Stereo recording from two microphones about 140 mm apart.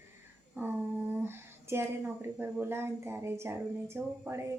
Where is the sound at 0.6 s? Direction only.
15° right (ahead or behind).